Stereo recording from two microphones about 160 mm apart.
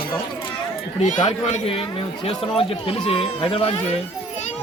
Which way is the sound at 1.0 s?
50° left (ahead or behind).